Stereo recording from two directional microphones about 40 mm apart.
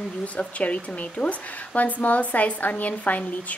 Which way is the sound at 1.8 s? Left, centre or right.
Left.